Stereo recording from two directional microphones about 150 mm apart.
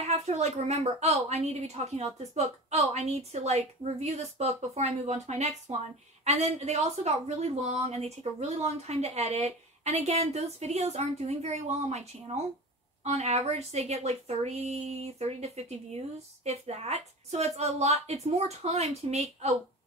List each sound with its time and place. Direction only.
0.0 s speech: 45° right (ahead or behind)